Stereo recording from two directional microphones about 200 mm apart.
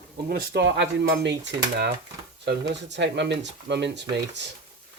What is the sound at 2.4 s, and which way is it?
Speech, 60° right (ahead or behind).